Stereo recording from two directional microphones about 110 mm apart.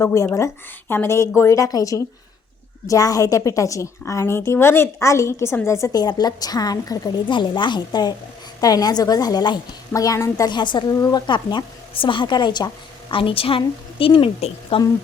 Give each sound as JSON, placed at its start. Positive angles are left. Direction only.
{"t": 0.0, "sound": "a woman's voice", "side_deg": 30}
{"t": 7.3, "sound": "a woman's voice", "side_deg": 45}
{"t": 10.5, "sound": "speech", "side_deg": 45}